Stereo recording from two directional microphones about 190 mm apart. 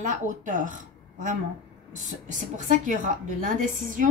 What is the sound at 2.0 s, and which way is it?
A woman's voice, 40° right (ahead or behind).